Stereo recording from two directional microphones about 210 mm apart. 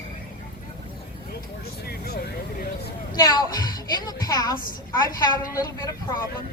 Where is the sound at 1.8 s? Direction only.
45° left (ahead or behind).